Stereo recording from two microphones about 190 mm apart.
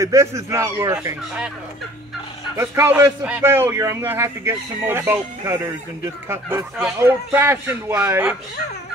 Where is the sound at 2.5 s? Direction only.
15° right (ahead or behind).